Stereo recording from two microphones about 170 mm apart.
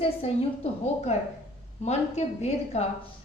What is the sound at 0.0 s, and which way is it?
A woman's voice, 35° left (ahead or behind).